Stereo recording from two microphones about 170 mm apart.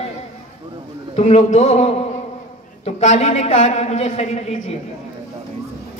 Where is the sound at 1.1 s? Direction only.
40° left (ahead or behind).